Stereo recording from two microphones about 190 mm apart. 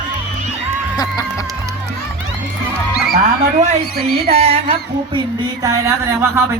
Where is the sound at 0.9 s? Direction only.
20° left (ahead or behind).